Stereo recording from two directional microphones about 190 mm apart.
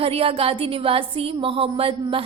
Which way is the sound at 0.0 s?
30° right (ahead or behind).